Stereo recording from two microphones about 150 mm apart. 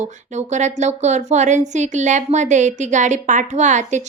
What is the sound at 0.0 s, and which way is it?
Speech, 50° right (ahead or behind).